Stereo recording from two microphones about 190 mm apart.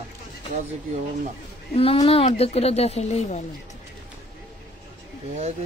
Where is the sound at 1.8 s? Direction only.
30° left (ahead or behind).